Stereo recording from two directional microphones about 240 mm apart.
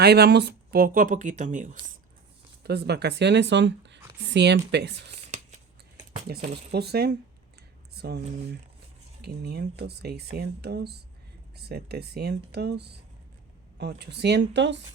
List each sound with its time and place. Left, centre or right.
0.0 s speech: right
2.6 s speech: right
5.1 s a sound: right
6.5 s speech: right
9.2 s speech: right